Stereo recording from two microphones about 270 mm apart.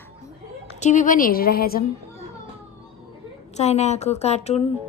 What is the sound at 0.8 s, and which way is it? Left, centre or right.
Speech, left.